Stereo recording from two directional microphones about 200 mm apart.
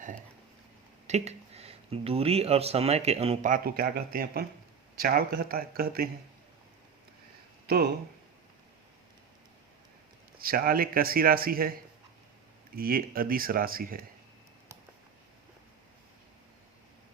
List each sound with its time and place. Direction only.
1.0 s speech: 35° right (ahead or behind); by 6.1 s 50° right (ahead or behind)
10.3 s speech: 45° right (ahead or behind)